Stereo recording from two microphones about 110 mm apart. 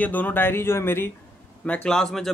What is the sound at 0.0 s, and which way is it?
Speech, 15° left (ahead or behind).